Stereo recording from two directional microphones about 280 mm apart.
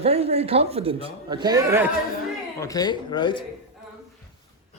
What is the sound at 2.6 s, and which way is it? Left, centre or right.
Speech, centre.